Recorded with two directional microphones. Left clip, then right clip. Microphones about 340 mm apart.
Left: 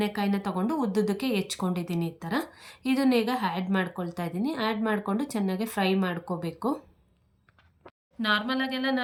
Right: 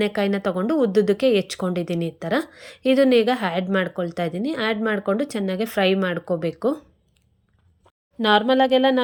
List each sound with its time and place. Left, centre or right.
0.0 s speech: centre
8.2 s speech: centre